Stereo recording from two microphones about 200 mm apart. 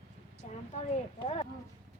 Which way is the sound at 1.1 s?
30° left (ahead or behind).